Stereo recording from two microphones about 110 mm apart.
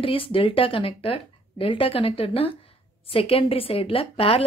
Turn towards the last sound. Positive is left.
turn(degrees=60)  # may be behind; listen again after turning